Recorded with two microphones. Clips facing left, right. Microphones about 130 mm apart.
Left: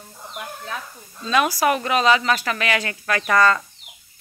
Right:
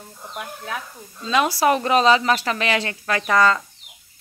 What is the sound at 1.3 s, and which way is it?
Speech, 25° right (ahead or behind).